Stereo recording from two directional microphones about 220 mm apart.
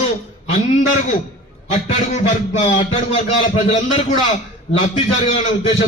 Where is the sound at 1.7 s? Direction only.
30° left (ahead or behind).